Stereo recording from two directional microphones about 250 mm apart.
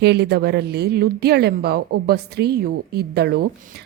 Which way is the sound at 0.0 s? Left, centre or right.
Right.